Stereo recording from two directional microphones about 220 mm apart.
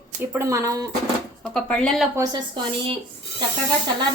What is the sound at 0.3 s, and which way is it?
Speech, 15° right (ahead or behind).